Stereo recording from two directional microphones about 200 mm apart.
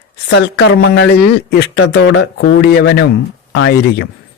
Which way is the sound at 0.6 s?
65° left (ahead or behind).